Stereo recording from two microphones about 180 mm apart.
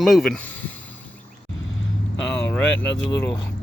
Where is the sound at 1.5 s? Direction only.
90° left.